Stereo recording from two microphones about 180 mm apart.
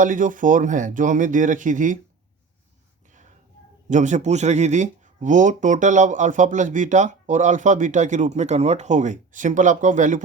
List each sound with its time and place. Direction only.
0.0 s speech: 45° right (ahead or behind)
3.8 s speech: 45° right (ahead or behind)